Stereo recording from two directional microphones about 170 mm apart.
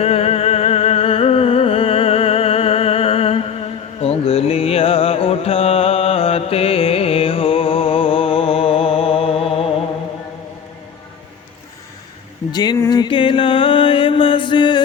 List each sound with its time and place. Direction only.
0.0 s music: 35° left (ahead or behind)
12.5 s music: 25° left (ahead or behind)